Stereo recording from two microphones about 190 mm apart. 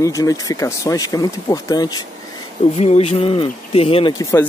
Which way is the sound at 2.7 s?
35° left (ahead or behind).